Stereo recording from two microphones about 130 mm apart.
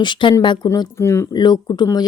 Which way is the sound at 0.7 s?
20° left (ahead or behind).